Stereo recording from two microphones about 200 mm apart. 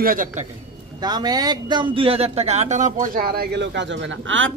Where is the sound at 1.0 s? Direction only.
20° right (ahead or behind).